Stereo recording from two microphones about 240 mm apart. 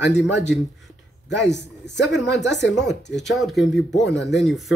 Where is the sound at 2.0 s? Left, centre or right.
Left.